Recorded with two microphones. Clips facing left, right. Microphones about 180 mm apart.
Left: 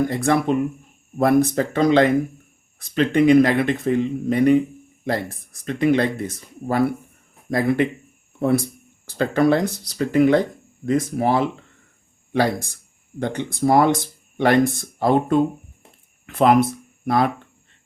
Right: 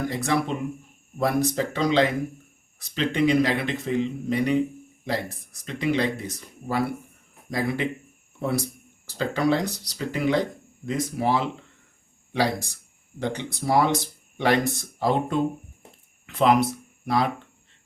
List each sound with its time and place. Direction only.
0.1 s speech: 50° left (ahead or behind)